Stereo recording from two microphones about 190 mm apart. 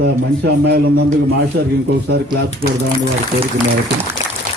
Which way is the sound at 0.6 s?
60° right (ahead or behind).